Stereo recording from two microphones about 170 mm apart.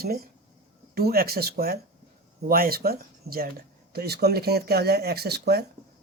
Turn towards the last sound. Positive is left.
turn(degrees=-70)  # may be behind; listen again after turning